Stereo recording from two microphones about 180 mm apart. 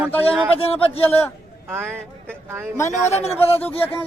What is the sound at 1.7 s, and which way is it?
Speech, 15° right (ahead or behind).